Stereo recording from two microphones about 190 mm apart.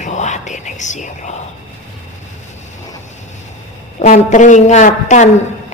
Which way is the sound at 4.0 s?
40° left (ahead or behind).